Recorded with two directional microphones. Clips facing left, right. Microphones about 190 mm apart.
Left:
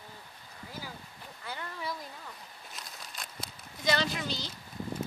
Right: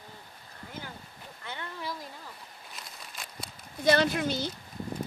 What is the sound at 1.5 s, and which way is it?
Speech, centre (ahead or behind).